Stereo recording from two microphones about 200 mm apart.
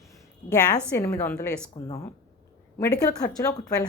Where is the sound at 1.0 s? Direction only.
15° left (ahead or behind).